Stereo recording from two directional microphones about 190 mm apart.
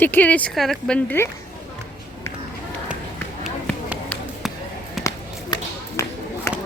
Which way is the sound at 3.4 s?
Centre (ahead or behind).